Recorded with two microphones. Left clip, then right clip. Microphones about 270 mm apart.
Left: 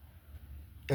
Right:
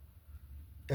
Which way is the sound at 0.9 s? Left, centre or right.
Left.